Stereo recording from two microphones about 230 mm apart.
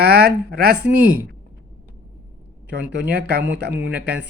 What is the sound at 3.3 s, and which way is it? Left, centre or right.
Speech, right.